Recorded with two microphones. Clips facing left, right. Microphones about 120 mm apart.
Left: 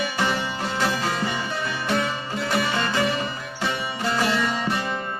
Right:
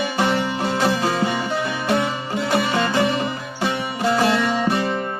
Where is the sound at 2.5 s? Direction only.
20° right (ahead or behind).